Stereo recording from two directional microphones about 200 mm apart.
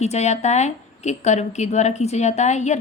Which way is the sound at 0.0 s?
35° left (ahead or behind).